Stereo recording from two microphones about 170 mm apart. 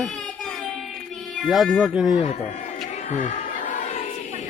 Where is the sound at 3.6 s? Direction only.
45° left (ahead or behind).